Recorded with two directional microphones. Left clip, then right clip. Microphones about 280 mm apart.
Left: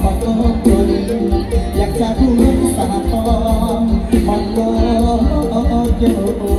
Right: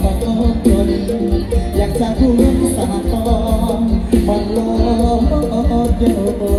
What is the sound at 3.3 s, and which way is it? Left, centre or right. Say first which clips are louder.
Music: left 1 dB; centre.